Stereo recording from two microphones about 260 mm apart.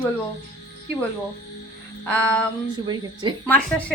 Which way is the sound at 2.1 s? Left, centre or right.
Centre.